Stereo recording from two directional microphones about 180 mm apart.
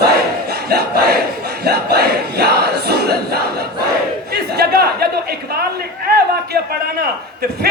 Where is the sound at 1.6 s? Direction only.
65° right (ahead or behind).